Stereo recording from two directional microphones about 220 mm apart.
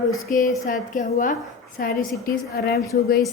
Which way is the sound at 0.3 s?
40° left (ahead or behind).